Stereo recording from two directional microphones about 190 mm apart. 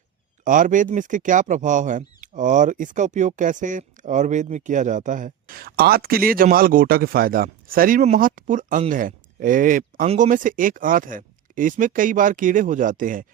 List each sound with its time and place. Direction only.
0.4 s speech: 45° right (ahead or behind)